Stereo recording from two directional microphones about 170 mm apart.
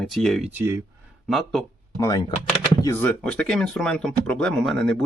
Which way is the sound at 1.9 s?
20° left (ahead or behind).